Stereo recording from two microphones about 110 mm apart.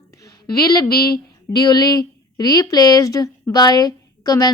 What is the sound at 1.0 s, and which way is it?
Speech, 35° left (ahead or behind).